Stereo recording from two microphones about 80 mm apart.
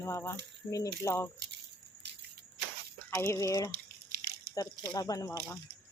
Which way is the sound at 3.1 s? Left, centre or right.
Left.